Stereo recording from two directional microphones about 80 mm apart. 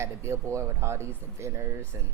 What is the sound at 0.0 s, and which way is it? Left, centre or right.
Speech, right.